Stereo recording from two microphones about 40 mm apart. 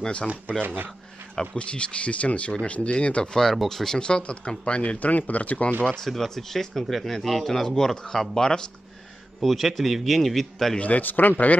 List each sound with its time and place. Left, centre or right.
0.0 s speech: left
0.6 s speech: right
1.6 s speech: left
3.6 s speech: centre
4.0 s speech: left
4.9 s speech: left
5.7 s speech: right
5.9 s speech: centre
9.4 s a man's voice: centre
10.8 s a man's voice: left